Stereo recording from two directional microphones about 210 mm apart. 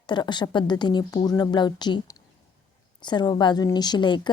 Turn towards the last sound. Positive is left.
turn(degrees=20)  # may be behind; listen again after turning